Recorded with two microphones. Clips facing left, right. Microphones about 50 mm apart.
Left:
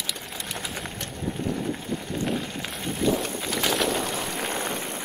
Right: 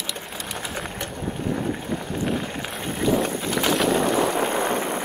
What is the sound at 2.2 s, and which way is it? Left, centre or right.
Vehicle, centre.